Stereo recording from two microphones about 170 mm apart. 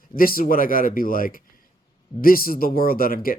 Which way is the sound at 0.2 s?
60° left (ahead or behind).